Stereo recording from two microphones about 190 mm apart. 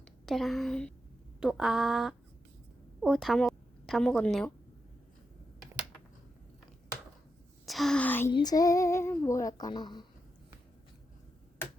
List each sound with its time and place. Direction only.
0.0 s a woman's voice: centre (ahead or behind)
7.6 s a sound: centre (ahead or behind)
8.3 s female singing: 20° left (ahead or behind)